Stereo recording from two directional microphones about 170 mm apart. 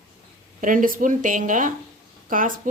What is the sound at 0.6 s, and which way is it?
A woman's voice, 50° right (ahead or behind).